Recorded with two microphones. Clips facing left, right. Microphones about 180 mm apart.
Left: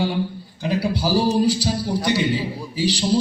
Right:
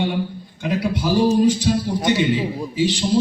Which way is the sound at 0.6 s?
35° left (ahead or behind).